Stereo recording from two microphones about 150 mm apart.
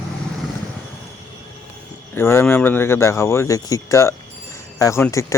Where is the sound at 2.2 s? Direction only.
15° left (ahead or behind).